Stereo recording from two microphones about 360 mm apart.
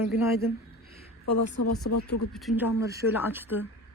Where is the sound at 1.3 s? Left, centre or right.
Left.